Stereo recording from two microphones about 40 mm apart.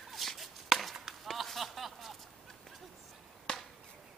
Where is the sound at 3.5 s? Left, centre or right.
Left.